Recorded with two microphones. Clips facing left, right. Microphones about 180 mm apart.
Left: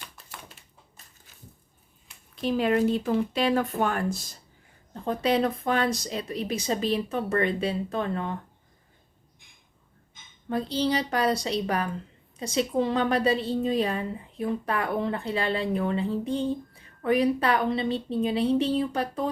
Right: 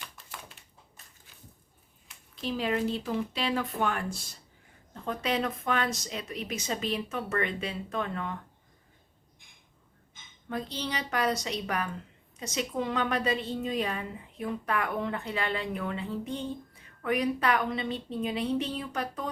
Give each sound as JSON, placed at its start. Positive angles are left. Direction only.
{"t": 2.3, "sound": "a woman's voice", "side_deg": 55}
{"t": 10.5, "sound": "a woman's voice", "side_deg": 30}